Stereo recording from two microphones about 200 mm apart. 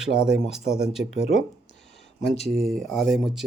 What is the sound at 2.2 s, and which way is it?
Speech, 35° left (ahead or behind).